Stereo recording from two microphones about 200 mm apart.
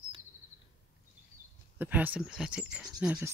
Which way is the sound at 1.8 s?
10° right (ahead or behind).